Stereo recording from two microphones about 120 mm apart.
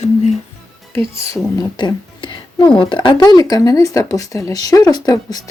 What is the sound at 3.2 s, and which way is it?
Speech, 30° left (ahead or behind).